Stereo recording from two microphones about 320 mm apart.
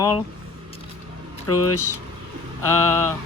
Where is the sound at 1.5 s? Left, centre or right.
Left.